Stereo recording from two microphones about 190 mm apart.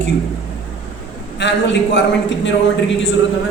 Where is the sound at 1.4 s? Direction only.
70° left (ahead or behind).